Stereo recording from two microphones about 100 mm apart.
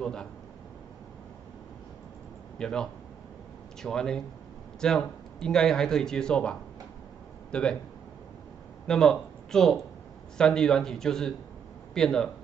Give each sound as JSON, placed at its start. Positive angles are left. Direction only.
{"t": 0.0, "sound": "a man's voice", "side_deg": 10}
{"t": 2.6, "sound": "speech", "side_deg": 5}
{"t": 7.5, "sound": "speech", "side_deg": 10}
{"t": 8.8, "sound": "speech", "side_deg": 5}